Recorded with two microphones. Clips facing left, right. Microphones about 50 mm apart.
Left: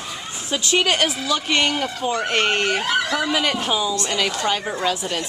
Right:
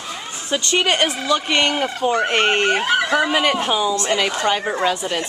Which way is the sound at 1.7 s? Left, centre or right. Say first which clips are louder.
Right 4 dB; right.